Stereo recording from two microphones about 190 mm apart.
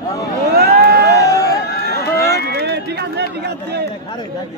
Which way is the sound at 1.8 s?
55° left (ahead or behind).